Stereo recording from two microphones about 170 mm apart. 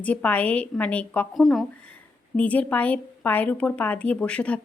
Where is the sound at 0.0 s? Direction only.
10° left (ahead or behind).